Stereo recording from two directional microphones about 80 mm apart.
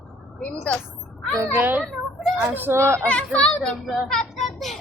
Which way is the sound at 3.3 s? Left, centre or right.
Centre.